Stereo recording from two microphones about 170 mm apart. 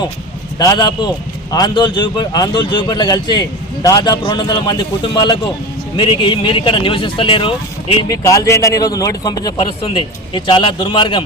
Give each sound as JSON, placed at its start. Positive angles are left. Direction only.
{"t": 0.6, "sound": "a man's voice", "side_deg": 25}
{"t": 8.2, "sound": "a man's voice", "side_deg": 20}